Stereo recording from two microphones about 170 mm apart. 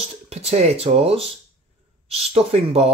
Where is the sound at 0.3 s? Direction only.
40° right (ahead or behind).